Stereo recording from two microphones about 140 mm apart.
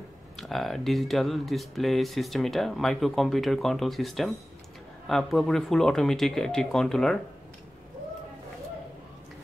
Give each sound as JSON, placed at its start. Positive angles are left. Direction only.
{"t": 0.4, "sound": "speech", "side_deg": 0}